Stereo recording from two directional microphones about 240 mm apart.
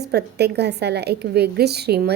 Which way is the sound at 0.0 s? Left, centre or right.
Right.